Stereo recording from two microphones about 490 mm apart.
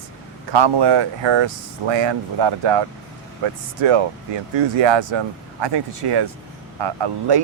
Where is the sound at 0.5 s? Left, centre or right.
Right.